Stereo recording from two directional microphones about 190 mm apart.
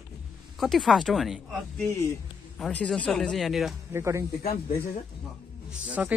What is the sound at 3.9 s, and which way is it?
Speech, 15° right (ahead or behind).